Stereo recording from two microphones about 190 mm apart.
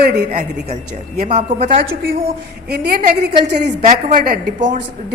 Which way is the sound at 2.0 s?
50° right (ahead or behind).